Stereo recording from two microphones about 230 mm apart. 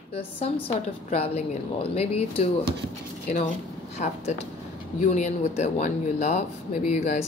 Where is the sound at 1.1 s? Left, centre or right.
Left.